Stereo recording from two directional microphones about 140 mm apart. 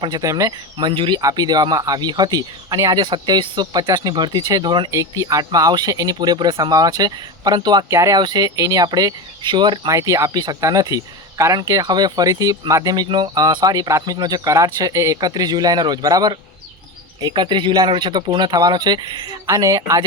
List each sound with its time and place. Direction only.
0.0 s speech: 25° right (ahead or behind)